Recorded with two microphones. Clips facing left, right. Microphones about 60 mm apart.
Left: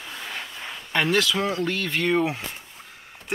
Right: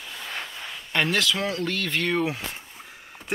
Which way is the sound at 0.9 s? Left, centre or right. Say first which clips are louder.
Left 2 dB; centre.